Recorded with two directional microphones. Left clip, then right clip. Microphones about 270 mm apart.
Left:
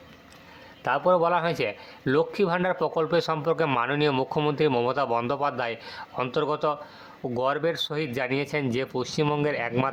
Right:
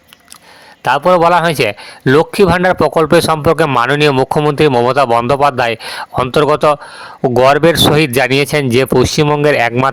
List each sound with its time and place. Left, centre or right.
0.9 s a man's voice: right